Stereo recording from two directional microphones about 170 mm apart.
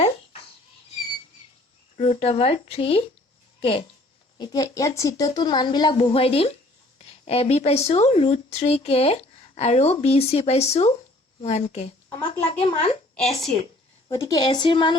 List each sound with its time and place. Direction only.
2.0 s speech: 35° left (ahead or behind)
4.4 s speech: 20° left (ahead or behind); by 13.3 s 40° left (ahead or behind)
14.1 s speech: 20° left (ahead or behind)